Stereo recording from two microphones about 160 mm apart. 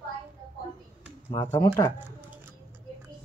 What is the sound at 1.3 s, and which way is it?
Speech, 25° left (ahead or behind).